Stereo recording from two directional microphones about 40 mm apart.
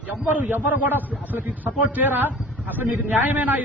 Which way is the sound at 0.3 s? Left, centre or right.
Right.